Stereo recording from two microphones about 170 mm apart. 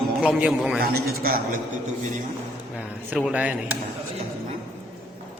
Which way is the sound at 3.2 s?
5° right (ahead or behind).